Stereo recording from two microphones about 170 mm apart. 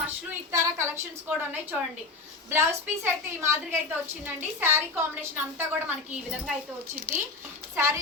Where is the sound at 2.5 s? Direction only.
15° right (ahead or behind).